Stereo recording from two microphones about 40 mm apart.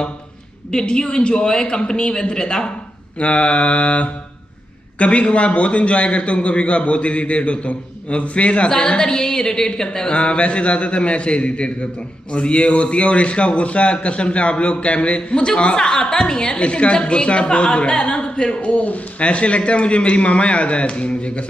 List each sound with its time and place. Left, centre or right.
0.7 s a man's voice: left
3.2 s mantra: left
4.9 s a man's voice: left